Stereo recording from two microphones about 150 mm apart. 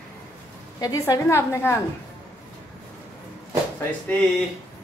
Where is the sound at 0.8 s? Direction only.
25° left (ahead or behind).